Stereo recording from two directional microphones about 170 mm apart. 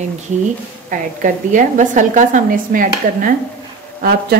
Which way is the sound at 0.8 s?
50° right (ahead or behind).